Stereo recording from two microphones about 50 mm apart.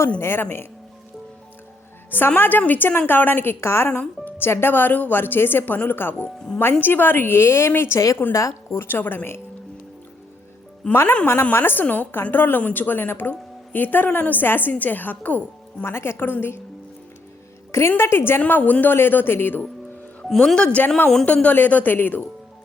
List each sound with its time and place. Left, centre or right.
0.2 s a woman's voice: left
2.0 s a woman's voice: left
6.2 s speech: centre
6.6 s a woman's voice: left
8.3 s a woman's voice: left
8.9 s a woman's voice: left
10.8 s a woman's voice: left
11.5 s a woman's voice: left
15.8 s a woman's voice: left
17.7 s a woman's voice: left
20.3 s speech: centre
20.6 s a woman's voice: left